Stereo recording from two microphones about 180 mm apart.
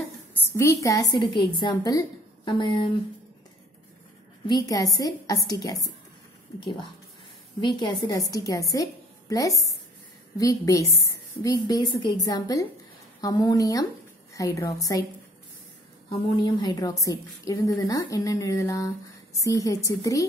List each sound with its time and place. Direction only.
0.5 s a woman's voice: 15° left (ahead or behind)
4.5 s a woman's voice: 20° left (ahead or behind)
7.6 s a woman's voice: 25° left (ahead or behind)
16.1 s a woman's voice: 25° left (ahead or behind)